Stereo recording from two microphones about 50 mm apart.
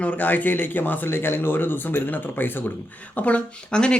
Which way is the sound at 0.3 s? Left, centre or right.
Left.